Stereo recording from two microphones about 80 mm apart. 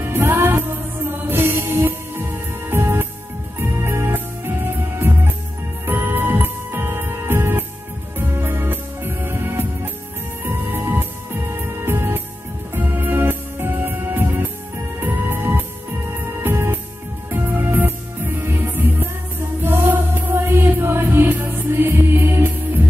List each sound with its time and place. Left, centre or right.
0.0 s music: right